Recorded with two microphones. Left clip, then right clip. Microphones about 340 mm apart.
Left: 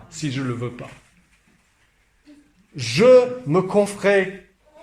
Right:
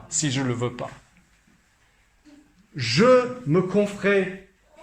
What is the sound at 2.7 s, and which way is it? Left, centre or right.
A man's voice, centre.